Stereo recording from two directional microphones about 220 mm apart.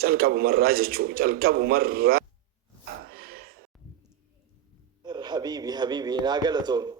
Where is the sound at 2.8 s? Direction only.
45° right (ahead or behind).